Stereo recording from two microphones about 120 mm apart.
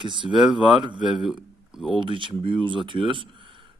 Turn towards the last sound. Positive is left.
turn(degrees=-45)  # may be behind; listen again after turning